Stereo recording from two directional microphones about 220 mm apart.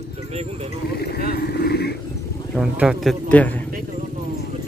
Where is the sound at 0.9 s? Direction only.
45° left (ahead or behind).